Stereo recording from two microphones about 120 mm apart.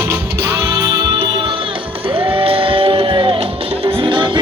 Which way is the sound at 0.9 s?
45° right (ahead or behind).